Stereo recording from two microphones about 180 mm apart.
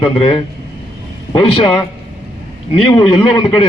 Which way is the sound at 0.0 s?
30° left (ahead or behind).